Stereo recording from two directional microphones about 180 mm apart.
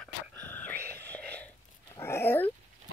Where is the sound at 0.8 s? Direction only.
60° right (ahead or behind).